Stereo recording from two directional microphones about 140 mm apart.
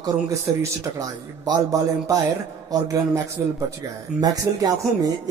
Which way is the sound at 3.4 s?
20° right (ahead or behind).